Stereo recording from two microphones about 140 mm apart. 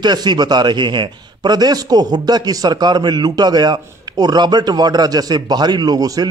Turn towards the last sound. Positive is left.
turn(degrees=-25)  # may be behind; listen again after turning